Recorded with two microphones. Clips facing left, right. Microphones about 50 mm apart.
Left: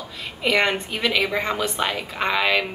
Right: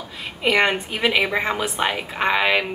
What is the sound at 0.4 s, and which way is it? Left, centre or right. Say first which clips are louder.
A woman's voice: right 2 dB; centre.